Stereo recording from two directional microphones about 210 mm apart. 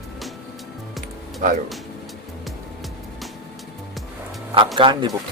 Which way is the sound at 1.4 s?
40° right (ahead or behind).